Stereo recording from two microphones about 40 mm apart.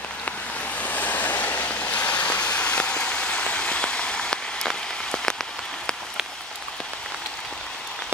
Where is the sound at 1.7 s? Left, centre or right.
Left.